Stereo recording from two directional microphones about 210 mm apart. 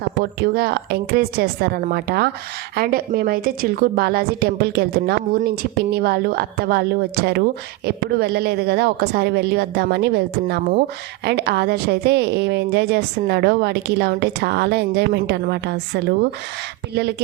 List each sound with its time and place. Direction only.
0.2 s a woman's voice: 50° right (ahead or behind)